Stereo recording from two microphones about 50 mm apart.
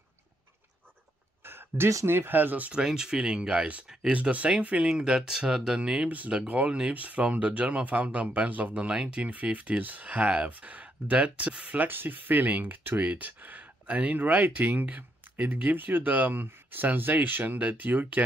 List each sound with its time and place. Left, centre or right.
1.4 s a sound: right
2.0 s speech: right
2.7 s speech: centre
4.8 s speech: centre
6.0 s speech: right